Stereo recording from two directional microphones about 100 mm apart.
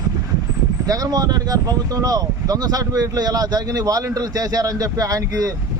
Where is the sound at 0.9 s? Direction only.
40° right (ahead or behind).